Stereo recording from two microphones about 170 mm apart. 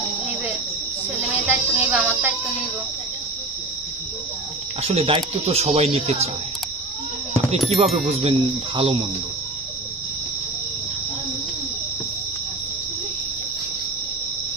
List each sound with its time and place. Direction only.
1.5 s music: 10° right (ahead or behind)
4.8 s speech: 35° right (ahead or behind)
7.7 s speech: 35° right (ahead or behind)